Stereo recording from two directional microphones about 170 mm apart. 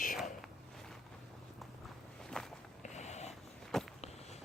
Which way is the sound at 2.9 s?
40° left (ahead or behind).